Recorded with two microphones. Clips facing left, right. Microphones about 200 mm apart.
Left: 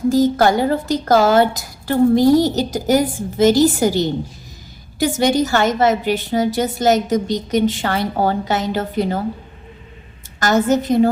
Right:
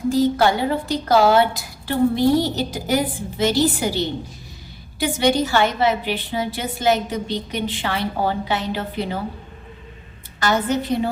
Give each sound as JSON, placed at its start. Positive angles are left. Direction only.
{"t": 0.1, "sound": "a woman's voice", "side_deg": 45}
{"t": 10.4, "sound": "a woman's voice", "side_deg": 45}